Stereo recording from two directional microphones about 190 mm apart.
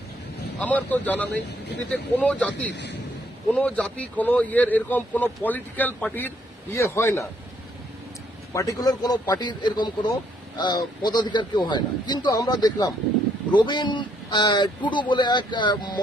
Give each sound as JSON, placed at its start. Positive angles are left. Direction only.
{"t": 0.6, "sound": "speech", "side_deg": 10}
{"t": 8.5, "sound": "a man's voice", "side_deg": 20}